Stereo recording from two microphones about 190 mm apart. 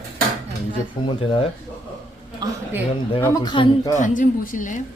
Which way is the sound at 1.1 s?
30° left (ahead or behind).